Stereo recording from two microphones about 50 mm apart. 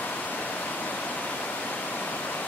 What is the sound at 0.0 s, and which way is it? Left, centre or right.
Waterfall, left.